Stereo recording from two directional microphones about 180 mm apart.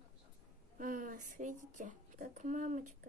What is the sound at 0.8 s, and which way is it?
Speech, 50° right (ahead or behind).